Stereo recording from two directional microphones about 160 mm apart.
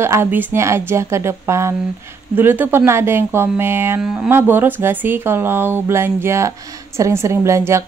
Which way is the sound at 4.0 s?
5° right (ahead or behind).